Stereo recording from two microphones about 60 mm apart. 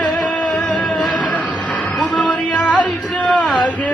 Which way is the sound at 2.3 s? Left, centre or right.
Centre.